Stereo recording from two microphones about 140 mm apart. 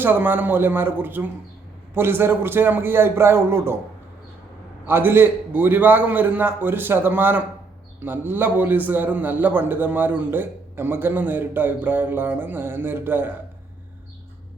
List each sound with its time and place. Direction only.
0.0 s a man's voice: 15° right (ahead or behind)
4.9 s a man's voice: 15° right (ahead or behind)